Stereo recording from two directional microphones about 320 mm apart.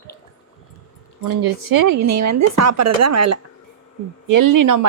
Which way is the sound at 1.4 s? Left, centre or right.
Right.